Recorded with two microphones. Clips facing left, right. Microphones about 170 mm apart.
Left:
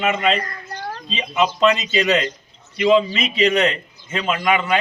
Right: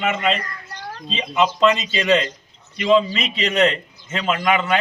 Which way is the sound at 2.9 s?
5° left (ahead or behind).